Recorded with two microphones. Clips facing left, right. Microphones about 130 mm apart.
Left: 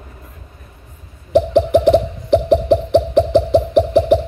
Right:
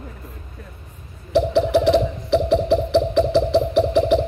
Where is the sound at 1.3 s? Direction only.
50° left (ahead or behind).